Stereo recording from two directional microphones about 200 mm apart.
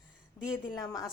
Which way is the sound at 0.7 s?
20° left (ahead or behind).